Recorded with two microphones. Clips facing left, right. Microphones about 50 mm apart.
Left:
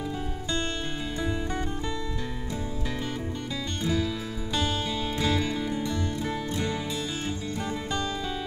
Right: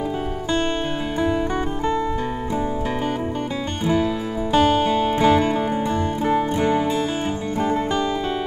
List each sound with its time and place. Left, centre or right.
3.8 s music: right